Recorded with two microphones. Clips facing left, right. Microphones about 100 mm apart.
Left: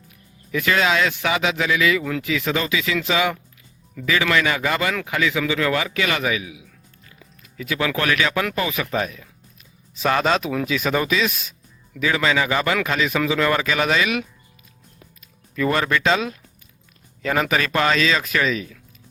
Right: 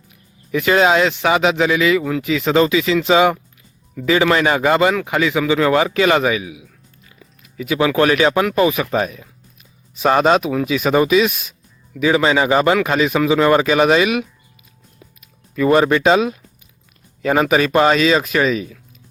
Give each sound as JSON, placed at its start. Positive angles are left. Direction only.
{"t": 0.5, "sound": "a man's voice", "side_deg": -25}
{"t": 15.5, "sound": "a man's voice", "side_deg": -25}
{"t": 17.5, "sound": "a man's voice", "side_deg": -20}